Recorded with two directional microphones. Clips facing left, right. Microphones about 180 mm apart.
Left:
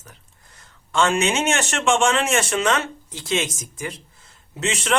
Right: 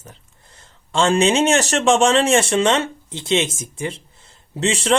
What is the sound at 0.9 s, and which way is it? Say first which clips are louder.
Speech: right 4 dB; 30° right (ahead or behind).